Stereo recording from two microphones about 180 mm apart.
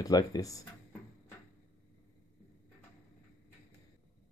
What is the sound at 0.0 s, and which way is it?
Speech, 20° left (ahead or behind).